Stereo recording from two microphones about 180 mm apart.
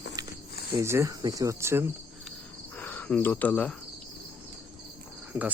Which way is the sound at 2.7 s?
10° left (ahead or behind).